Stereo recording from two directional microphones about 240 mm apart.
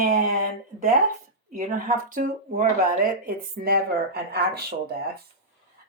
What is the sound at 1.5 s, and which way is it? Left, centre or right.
Speech, right.